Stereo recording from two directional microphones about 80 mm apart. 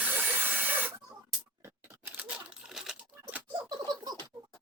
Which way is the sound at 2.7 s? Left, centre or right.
Centre.